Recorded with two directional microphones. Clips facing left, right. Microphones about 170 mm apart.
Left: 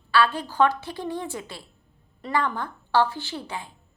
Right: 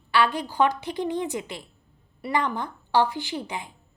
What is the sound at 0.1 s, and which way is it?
A woman's voice, 15° right (ahead or behind).